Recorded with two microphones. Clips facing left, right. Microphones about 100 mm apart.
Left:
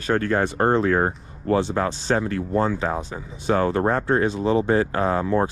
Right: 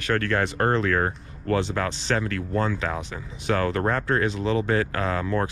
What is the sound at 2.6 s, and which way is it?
Speech, 45° left (ahead or behind).